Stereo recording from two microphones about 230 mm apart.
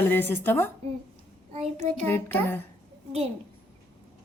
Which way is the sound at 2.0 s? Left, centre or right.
Centre.